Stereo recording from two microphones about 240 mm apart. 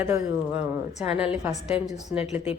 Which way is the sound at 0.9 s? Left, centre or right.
Left.